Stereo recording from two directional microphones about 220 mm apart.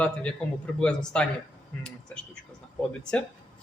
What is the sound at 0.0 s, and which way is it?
Speech, 5° left (ahead or behind).